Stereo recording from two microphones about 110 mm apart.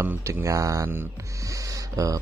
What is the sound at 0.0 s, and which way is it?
A man's voice, 20° right (ahead or behind).